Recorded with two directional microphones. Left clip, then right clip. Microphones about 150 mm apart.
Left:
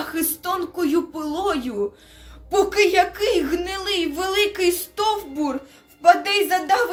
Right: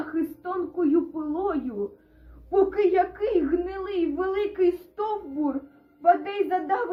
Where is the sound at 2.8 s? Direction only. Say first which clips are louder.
Left 5 dB; 15° left (ahead or behind).